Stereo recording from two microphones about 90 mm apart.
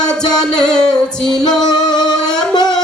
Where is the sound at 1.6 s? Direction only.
50° left (ahead or behind).